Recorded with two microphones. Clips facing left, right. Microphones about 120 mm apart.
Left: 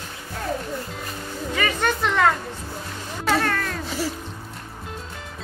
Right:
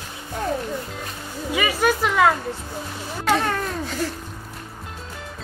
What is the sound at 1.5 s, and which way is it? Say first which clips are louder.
Music: right 3 dB; 10° right (ahead or behind).